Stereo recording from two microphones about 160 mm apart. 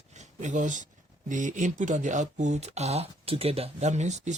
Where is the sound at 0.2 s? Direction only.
50° right (ahead or behind).